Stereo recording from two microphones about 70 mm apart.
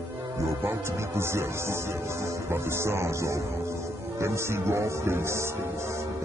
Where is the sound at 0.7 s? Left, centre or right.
Right.